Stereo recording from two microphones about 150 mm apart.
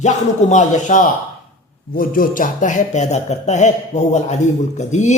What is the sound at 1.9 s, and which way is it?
A man's voice, 75° left (ahead or behind).